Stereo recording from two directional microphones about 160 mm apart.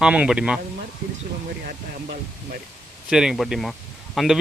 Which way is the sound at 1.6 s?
60° right (ahead or behind).